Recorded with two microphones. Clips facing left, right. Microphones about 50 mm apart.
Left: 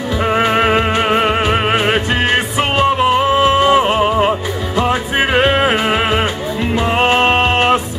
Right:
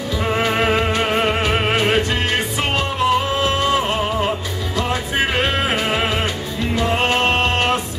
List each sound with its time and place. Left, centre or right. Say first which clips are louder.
0.3 s music: left 5 dB; left